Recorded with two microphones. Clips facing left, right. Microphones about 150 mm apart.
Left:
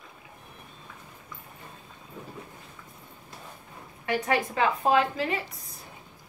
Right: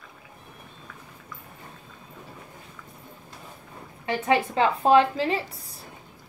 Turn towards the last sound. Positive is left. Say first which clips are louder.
# right 4 dB
turn(degrees=-30)  # may be behind; listen again after turning